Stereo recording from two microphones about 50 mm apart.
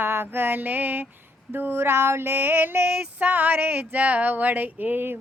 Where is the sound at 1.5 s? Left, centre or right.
Right.